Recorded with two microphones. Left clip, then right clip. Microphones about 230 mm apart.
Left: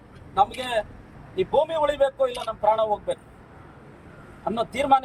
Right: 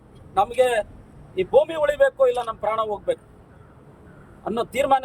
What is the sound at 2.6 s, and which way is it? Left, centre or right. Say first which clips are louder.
Speech: left 3 dB; right.